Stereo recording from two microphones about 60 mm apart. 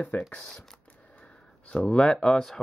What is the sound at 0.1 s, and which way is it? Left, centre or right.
Speech, left.